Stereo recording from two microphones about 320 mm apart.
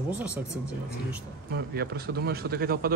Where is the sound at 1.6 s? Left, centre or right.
Right.